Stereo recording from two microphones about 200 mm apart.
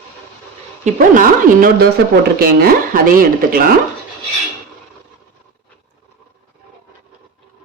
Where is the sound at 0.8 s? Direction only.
45° right (ahead or behind).